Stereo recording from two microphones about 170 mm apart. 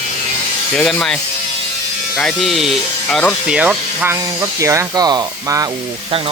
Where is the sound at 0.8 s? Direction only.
5° left (ahead or behind).